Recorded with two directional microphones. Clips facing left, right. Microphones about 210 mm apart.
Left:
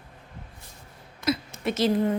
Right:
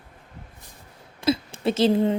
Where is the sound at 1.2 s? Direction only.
30° right (ahead or behind).